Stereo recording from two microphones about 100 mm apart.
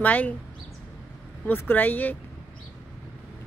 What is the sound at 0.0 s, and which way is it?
Speech, 15° left (ahead or behind).